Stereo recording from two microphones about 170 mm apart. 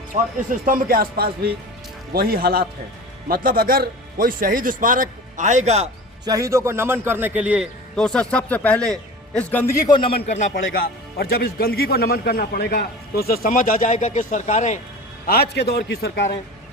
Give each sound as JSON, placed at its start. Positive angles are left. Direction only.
{"t": 0.3, "sound": "speech", "side_deg": -50}
{"t": 6.2, "sound": "a man's voice", "side_deg": -20}
{"t": 7.9, "sound": "a man's voice", "side_deg": 5}
{"t": 9.9, "sound": "a man's voice", "side_deg": 30}
{"t": 10.2, "sound": "speech", "side_deg": 45}
{"t": 15.3, "sound": "a man's voice", "side_deg": 70}